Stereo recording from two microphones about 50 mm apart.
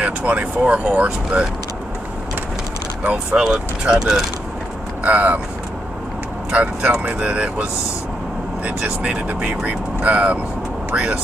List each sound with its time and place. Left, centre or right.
0.3 s speech: right
3.0 s speech: right
3.3 s speech: centre
5.0 s speech: right
6.5 s speech: right
8.6 s speech: centre